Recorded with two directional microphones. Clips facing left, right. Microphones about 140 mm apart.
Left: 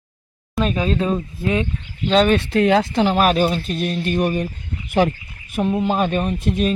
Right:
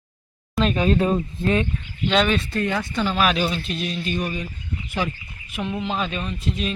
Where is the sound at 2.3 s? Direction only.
90° left.